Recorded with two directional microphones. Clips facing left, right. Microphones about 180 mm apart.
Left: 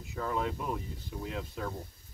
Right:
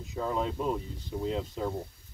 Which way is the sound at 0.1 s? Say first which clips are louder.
Right 2 dB; 25° right (ahead or behind).